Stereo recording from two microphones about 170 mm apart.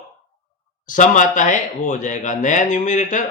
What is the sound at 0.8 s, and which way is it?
Speech, 50° left (ahead or behind).